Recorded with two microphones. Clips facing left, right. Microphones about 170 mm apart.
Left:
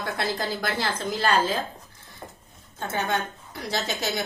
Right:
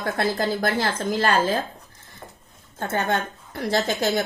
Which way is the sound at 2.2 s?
15° left (ahead or behind).